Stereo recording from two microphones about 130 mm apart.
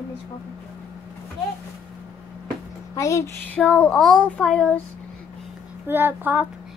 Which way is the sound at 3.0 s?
20° left (ahead or behind).